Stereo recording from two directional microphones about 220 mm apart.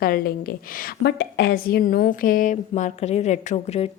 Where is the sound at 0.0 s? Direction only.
40° left (ahead or behind).